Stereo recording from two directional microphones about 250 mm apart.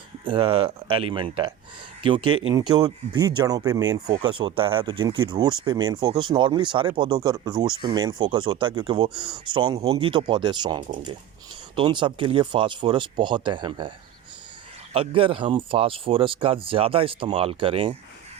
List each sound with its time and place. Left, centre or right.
0.3 s speech: right
14.9 s speech: right